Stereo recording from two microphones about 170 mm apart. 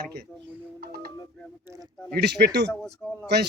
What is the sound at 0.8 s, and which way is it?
Music, 65° right (ahead or behind).